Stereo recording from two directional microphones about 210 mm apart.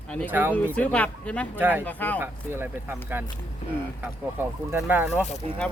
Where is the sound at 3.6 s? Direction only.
30° left (ahead or behind).